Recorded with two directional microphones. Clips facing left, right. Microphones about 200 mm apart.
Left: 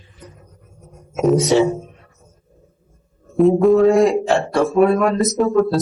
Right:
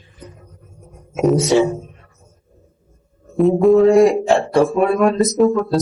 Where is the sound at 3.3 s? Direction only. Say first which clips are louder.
Even; centre (ahead or behind).